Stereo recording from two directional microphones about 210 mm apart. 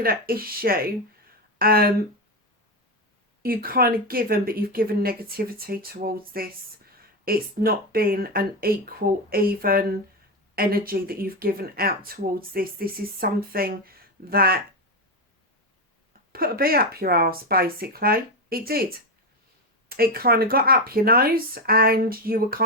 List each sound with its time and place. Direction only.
0.0 s speech: 45° right (ahead or behind)
3.4 s speech: 45° right (ahead or behind)
16.3 s speech: 45° right (ahead or behind)
19.9 s speech: 45° right (ahead or behind)